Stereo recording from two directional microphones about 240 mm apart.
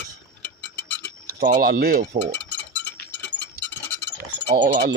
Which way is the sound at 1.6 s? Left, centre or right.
Right.